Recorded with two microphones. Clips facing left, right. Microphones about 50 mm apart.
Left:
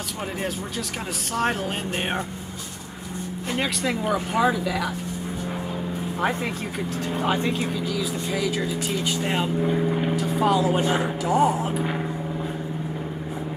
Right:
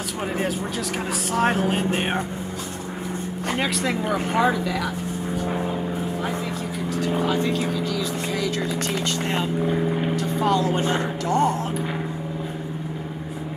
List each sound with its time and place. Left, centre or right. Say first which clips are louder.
1.3 s speech: right 4 dB; centre
3.5 s speech: right 1 dB; centre
7.2 s speech: right 1 dB; left
7.7 s speech: right 1 dB; centre
9.7 s speech: even; centre